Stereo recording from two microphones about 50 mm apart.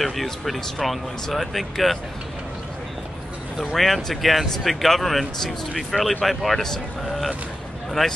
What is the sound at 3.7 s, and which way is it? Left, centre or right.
Speech, centre.